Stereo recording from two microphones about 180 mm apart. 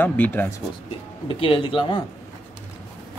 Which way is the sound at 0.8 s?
30° left (ahead or behind).